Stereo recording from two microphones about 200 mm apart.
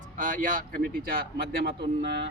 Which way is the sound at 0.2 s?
40° right (ahead or behind).